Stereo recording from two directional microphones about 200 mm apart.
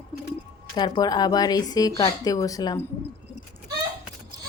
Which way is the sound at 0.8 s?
20° left (ahead or behind).